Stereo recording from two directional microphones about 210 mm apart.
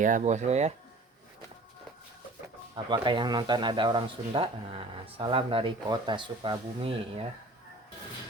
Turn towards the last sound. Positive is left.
turn(degrees=-25)  # may be behind; listen again after turning